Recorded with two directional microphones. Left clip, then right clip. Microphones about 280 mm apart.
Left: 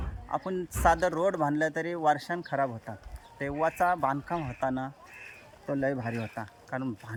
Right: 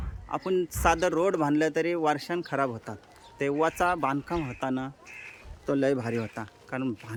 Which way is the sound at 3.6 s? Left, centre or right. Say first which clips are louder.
Left 1 dB; centre.